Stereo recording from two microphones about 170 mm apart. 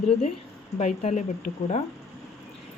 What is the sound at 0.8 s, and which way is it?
Speech, 40° left (ahead or behind).